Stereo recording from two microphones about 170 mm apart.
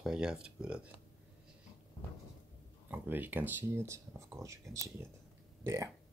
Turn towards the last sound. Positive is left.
turn(degrees=-15)  # may be behind; listen again after turning